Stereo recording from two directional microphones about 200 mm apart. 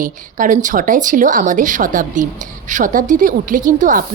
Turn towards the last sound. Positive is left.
turn(degrees=-40)  # may be behind; listen again after turning